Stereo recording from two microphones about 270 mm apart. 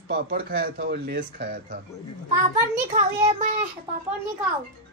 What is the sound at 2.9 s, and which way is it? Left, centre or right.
Speech, right.